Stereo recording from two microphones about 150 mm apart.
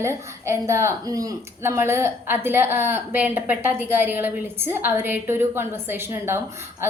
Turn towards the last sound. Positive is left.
turn(degrees=-15)  # may be behind; listen again after turning